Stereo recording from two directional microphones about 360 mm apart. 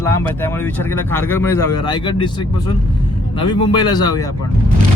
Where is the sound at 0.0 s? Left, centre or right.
Centre.